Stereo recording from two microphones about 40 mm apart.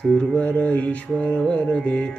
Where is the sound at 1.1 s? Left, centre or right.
Left.